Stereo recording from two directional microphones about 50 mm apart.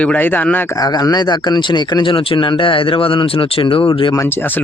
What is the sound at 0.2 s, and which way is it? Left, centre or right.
Speech, left.